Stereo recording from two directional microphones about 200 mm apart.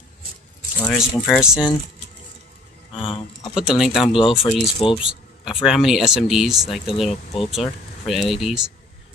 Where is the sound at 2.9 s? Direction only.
25° left (ahead or behind).